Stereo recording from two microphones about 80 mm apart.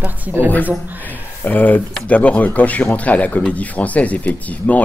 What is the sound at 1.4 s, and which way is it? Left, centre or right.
Speech, left.